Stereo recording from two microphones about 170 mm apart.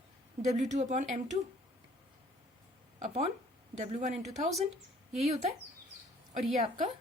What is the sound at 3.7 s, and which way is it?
Speech, 40° right (ahead or behind).